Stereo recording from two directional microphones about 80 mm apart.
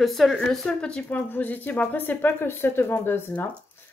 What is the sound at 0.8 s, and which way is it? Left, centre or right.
Speech, centre.